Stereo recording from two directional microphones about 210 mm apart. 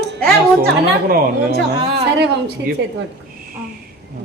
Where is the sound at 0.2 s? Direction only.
45° right (ahead or behind).